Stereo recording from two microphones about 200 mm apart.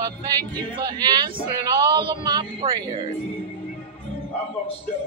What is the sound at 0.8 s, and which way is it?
Speech, 20° right (ahead or behind).